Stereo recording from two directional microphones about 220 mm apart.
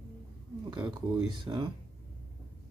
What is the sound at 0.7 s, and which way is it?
Speech, 20° right (ahead or behind).